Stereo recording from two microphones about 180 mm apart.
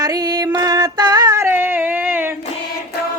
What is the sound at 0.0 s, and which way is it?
Female singing, 20° right (ahead or behind).